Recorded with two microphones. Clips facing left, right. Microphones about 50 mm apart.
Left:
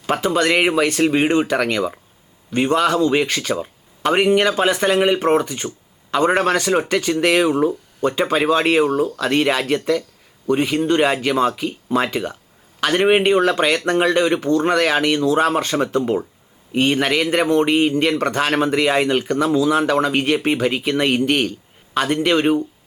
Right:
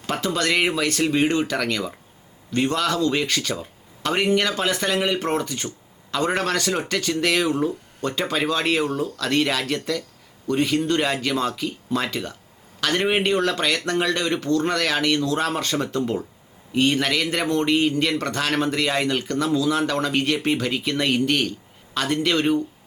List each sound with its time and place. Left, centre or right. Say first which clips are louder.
0.1 s speech: left 5 dB; left
8.9 s speech: left 7 dB; left
9.1 s speech: left 4 dB; left